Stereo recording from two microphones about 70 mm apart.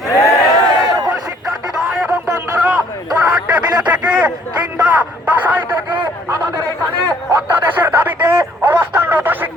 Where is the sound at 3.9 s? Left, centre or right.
Centre.